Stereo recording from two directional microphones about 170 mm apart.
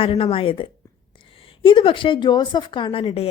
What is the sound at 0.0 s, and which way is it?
A woman's voice, 35° left (ahead or behind).